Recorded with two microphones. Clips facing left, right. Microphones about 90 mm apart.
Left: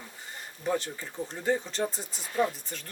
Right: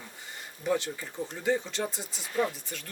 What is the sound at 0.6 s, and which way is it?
Speech, 35° left (ahead or behind).